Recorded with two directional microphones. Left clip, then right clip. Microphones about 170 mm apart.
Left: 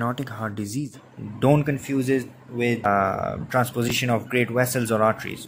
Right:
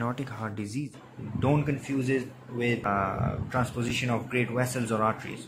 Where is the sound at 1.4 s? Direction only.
45° left (ahead or behind).